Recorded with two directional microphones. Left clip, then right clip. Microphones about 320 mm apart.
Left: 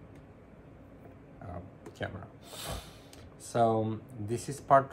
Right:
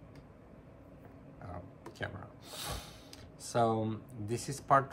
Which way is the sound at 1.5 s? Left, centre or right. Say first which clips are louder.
Left 2 dB; centre.